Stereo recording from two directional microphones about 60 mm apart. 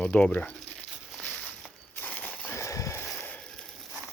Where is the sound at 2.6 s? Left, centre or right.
Left.